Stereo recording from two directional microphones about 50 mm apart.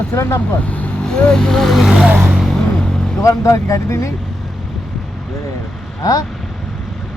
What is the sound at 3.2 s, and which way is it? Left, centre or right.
Speech, left.